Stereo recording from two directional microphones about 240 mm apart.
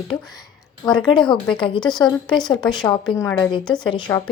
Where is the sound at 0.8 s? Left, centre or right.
Centre.